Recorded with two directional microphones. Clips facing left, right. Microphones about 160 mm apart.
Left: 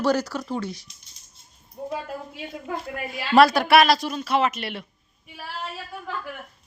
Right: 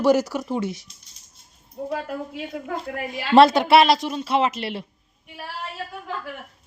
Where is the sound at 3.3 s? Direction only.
25° right (ahead or behind).